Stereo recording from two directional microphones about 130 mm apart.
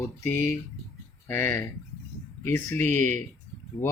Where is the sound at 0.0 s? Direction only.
20° left (ahead or behind).